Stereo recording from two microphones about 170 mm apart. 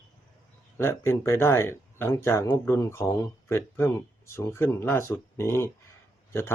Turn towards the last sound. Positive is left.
turn(degrees=15)  # may be behind; listen again after turning